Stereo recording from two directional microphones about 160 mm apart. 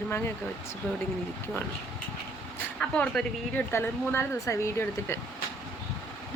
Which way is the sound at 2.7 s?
5° left (ahead or behind).